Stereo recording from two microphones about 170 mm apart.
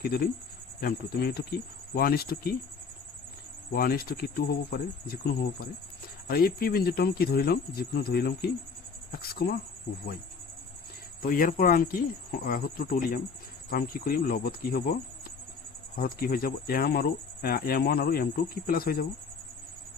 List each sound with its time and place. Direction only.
0.0 s speech: 65° left (ahead or behind)
3.7 s speech: 65° left (ahead or behind)
11.2 s speech: 55° left (ahead or behind)
16.0 s speech: 60° left (ahead or behind)